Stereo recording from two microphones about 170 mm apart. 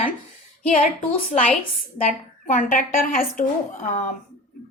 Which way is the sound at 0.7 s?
45° left (ahead or behind).